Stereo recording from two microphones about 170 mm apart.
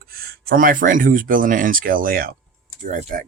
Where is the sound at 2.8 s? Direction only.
50° right (ahead or behind).